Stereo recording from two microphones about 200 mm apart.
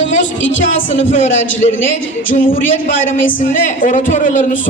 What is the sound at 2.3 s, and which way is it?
Speech, 40° left (ahead or behind).